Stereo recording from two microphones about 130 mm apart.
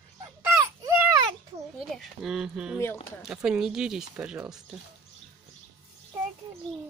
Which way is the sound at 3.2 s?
5° right (ahead or behind).